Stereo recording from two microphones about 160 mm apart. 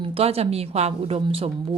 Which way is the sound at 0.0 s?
35° right (ahead or behind).